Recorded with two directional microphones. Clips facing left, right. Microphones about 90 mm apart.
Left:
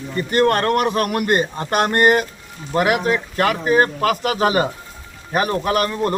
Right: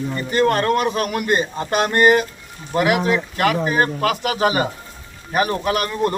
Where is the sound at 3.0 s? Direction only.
35° left (ahead or behind).